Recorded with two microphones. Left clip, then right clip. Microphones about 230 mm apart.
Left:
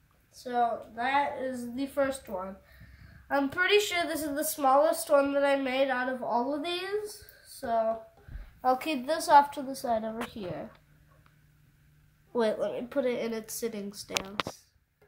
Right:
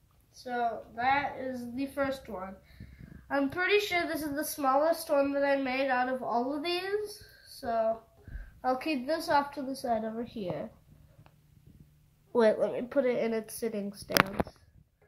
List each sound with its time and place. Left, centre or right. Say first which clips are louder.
0.4 s a woman's voice: left 4 dB; centre
9.8 s a woman's voice: left 2 dB; centre
12.3 s a woman's voice: right 3 dB; right